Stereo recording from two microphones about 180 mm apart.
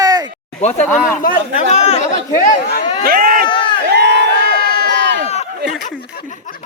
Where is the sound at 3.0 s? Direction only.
55° right (ahead or behind).